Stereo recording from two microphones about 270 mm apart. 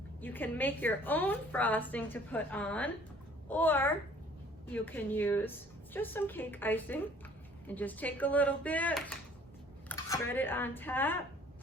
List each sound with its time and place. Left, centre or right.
0.2 s a woman's voice: centre